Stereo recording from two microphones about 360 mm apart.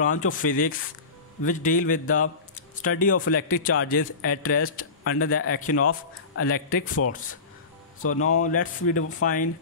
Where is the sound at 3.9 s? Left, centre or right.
Left.